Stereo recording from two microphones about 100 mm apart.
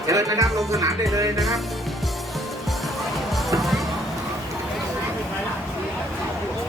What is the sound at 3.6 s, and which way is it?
Music, centre (ahead or behind).